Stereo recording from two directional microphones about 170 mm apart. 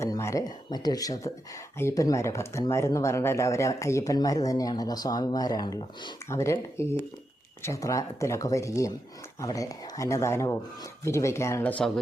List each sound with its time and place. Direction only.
0.0 s speech: 15° left (ahead or behind)